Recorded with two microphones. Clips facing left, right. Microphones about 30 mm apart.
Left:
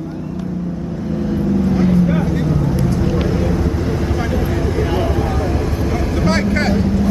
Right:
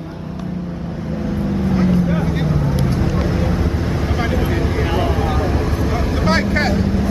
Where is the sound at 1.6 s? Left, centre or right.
Centre.